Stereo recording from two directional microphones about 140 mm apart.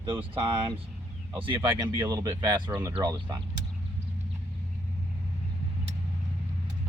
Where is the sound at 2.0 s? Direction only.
25° right (ahead or behind).